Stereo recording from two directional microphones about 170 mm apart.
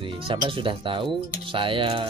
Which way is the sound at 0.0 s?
30° right (ahead or behind).